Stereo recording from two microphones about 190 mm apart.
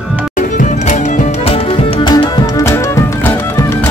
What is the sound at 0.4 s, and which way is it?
Music, 40° left (ahead or behind).